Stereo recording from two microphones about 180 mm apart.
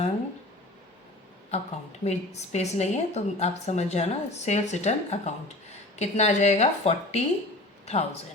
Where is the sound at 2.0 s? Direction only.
40° left (ahead or behind).